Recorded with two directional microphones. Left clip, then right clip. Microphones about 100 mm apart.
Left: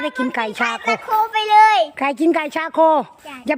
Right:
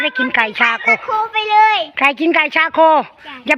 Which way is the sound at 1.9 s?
30° left (ahead or behind).